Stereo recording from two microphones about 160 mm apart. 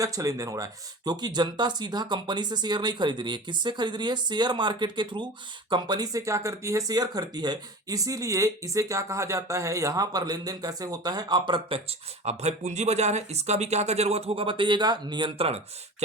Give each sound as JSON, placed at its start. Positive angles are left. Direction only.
{"t": 0.0, "sound": "speech", "side_deg": -20}